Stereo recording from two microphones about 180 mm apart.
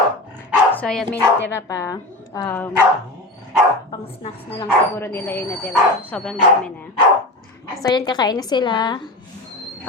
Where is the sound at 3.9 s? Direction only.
25° left (ahead or behind).